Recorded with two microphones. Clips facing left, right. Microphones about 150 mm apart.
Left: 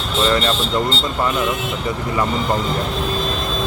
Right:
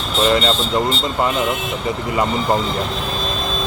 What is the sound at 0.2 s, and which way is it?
Speech, 20° right (ahead or behind).